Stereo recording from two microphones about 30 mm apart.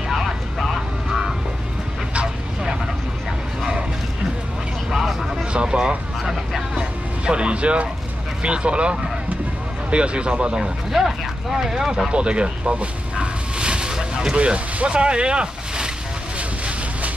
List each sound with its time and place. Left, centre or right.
0.1 s vehicle: centre
5.5 s vehicle: right
6.8 s music: right
8.4 s speech: right
10.9 s speech: centre
12.1 s speech: right
13.1 s a sound: right
14.3 s speech: right
16.3 s boat: right